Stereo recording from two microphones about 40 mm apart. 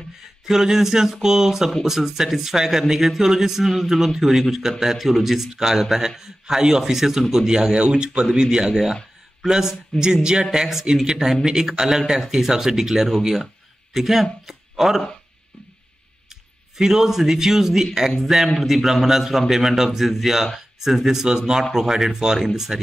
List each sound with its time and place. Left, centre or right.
0.5 s speech: centre
16.7 s speech: centre